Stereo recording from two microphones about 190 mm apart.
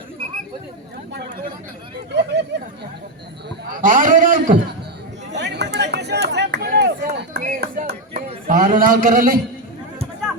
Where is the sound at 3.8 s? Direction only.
45° right (ahead or behind).